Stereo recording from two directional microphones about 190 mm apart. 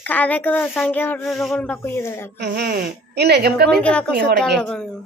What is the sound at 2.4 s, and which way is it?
A woman's voice, 60° right (ahead or behind).